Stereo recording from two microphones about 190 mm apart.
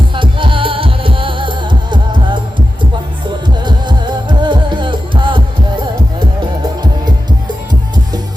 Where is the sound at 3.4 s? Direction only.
25° right (ahead or behind).